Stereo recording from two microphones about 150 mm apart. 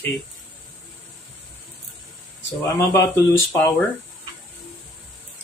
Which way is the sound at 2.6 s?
20° left (ahead or behind).